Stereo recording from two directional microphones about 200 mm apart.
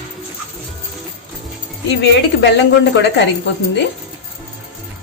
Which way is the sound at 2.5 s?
60° left (ahead or behind).